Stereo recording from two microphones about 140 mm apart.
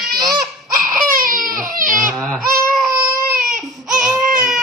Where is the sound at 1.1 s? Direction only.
90° right.